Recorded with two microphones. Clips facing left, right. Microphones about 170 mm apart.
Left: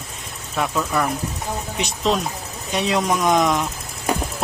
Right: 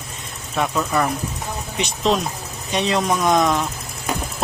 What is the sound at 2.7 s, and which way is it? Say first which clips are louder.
Speech: even; 5° left (ahead or behind).